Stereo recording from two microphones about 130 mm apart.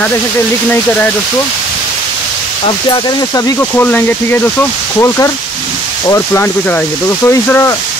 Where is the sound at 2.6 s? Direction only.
40° left (ahead or behind).